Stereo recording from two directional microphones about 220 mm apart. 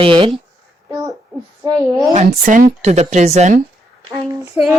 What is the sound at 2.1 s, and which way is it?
Speech, 35° right (ahead or behind).